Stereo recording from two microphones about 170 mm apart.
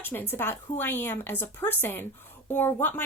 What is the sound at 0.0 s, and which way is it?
Speech, 10° left (ahead or behind).